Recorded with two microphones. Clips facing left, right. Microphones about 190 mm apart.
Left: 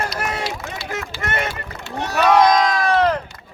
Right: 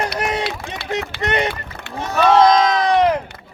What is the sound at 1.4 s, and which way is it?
Run, 60° right (ahead or behind).